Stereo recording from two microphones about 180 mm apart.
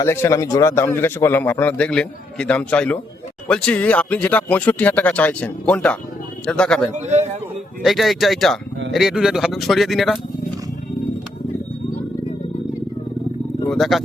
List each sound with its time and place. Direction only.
0.0 s a man's voice: 15° left (ahead or behind)
6.9 s a man's voice: 40° right (ahead or behind)
7.8 s speech: centre (ahead or behind)
13.7 s speech: centre (ahead or behind)